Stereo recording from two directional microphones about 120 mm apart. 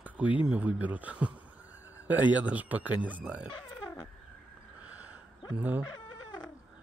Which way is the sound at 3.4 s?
35° left (ahead or behind).